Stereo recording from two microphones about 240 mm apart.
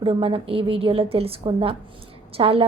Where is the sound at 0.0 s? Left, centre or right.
Right.